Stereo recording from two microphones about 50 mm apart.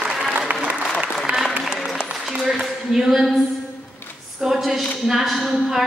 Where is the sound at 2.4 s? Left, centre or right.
Centre.